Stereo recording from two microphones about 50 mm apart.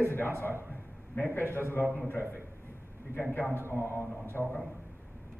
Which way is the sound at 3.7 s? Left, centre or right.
Left.